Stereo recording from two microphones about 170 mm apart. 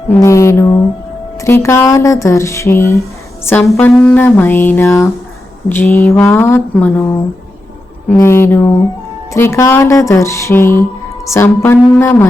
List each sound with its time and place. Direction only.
0.1 s a woman's voice: 15° left (ahead or behind)
8.2 s speech: 15° left (ahead or behind)